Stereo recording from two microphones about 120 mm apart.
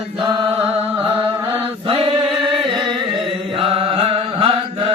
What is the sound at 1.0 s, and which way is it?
Music, 50° right (ahead or behind).